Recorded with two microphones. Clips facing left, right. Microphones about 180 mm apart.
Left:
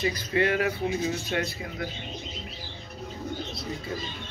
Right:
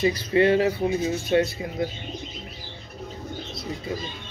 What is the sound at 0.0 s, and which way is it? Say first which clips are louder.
Speech: right 6 dB; 25° right (ahead or behind).